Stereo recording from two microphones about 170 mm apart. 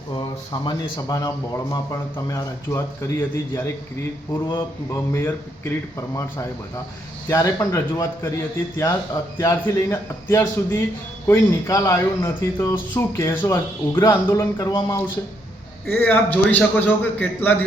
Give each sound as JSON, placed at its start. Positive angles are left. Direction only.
{"t": 0.1, "sound": "a man's voice", "side_deg": 30}
{"t": 4.9, "sound": "a man's voice", "side_deg": 15}
{"t": 7.3, "sound": "a man's voice", "side_deg": 15}